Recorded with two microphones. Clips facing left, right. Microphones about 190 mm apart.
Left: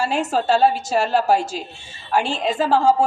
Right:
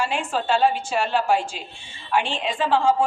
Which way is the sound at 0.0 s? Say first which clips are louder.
Left 4 dB; 40° left (ahead or behind).